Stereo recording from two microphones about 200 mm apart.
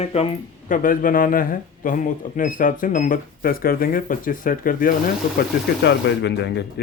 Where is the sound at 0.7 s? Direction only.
45° left (ahead or behind).